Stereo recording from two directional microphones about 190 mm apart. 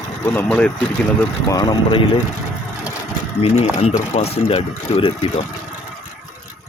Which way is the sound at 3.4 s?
30° left (ahead or behind).